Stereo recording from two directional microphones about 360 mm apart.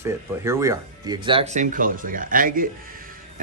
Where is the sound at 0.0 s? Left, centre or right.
Centre.